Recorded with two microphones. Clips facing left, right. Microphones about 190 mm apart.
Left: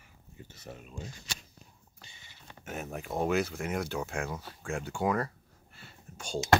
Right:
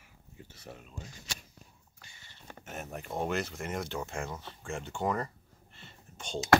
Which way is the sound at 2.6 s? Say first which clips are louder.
Left 3 dB; centre (ahead or behind).